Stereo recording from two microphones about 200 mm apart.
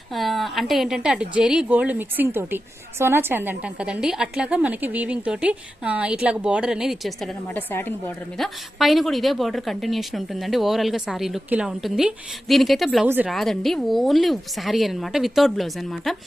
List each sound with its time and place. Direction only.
0.1 s a woman's voice: centre (ahead or behind)
8.4 s a woman's voice: centre (ahead or behind)